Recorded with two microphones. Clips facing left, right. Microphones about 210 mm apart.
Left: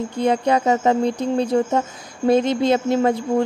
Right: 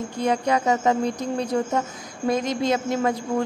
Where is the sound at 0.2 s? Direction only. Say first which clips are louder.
Left 4 dB; 30° left (ahead or behind).